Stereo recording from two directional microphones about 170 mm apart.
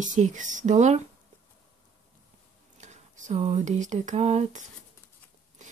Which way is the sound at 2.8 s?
45° right (ahead or behind).